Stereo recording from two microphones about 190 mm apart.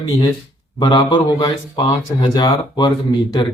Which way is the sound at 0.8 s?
20° left (ahead or behind).